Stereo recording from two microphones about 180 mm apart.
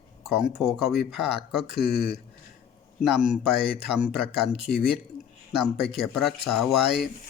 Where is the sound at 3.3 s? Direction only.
5° right (ahead or behind).